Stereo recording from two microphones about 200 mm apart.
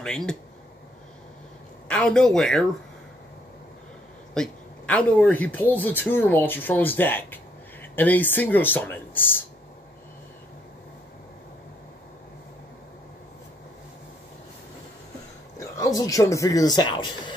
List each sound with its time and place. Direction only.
0.0 s a man's voice: 5° left (ahead or behind)
1.9 s a man's voice: 5° left (ahead or behind)
4.3 s speech: 5° left (ahead or behind)
15.5 s speech: 15° left (ahead or behind)